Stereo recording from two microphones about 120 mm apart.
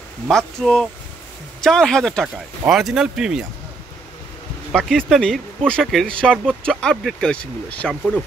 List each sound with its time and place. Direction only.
0.3 s speech: 5° left (ahead or behind)
2.2 s speech: 5° right (ahead or behind)
4.7 s speech: centre (ahead or behind)